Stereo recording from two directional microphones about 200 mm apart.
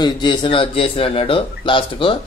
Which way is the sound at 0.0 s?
25° left (ahead or behind).